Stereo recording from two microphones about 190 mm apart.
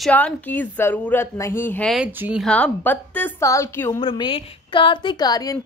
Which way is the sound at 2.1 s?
10° right (ahead or behind).